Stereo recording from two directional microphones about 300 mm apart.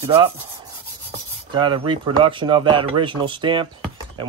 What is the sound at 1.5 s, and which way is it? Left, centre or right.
Rub, centre.